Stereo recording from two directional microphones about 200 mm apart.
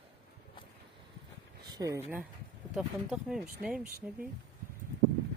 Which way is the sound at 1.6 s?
20° right (ahead or behind).